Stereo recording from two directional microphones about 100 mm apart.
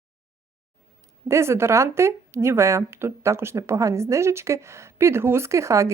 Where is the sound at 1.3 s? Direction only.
25° right (ahead or behind).